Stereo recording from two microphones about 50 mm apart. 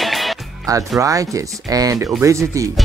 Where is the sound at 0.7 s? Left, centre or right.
Right.